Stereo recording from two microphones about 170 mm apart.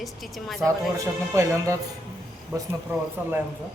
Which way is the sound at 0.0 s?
Centre (ahead or behind).